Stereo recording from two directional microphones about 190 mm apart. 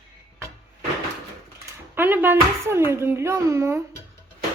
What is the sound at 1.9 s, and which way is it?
Speech, 10° right (ahead or behind).